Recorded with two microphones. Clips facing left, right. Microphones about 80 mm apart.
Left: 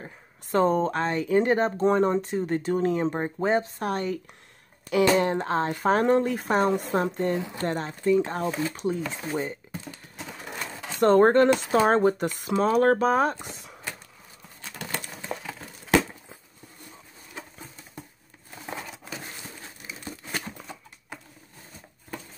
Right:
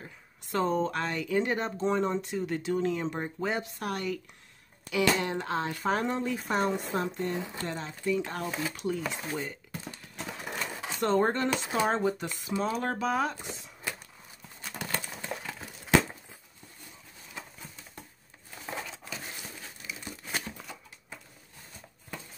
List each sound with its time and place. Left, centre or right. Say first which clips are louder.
0.0 s speech: left 5 dB; left
2.2 s speech: left 5 dB; left
4.8 s speech: left 6 dB; left
10.1 s sewing machine: right 1 dB; centre
11.0 s speech: left 9 dB; left
19.9 s crumpling: even; left
20.2 s a sound: left 1 dB; centre